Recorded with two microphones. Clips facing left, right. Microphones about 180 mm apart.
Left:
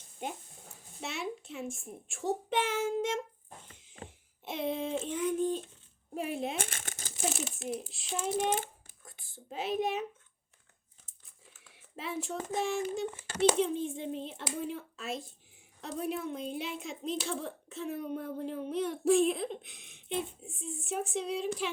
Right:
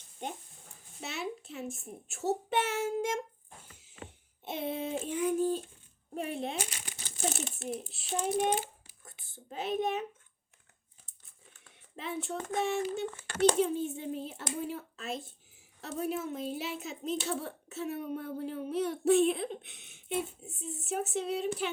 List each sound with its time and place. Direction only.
1.0 s speech: centre (ahead or behind)
4.0 s a sound: 35° left (ahead or behind)
4.4 s speech: 5° right (ahead or behind)
6.6 s crumpling: 50° left (ahead or behind)
7.2 s speech: centre (ahead or behind)
8.5 s a sound: 50° left (ahead or behind)
9.3 s speech: centre (ahead or behind)
11.7 s a sound: centre (ahead or behind)
12.5 s speech: centre (ahead or behind)
13.1 s a child's voice: 10° left (ahead or behind)
13.6 s speech: 5° right (ahead or behind)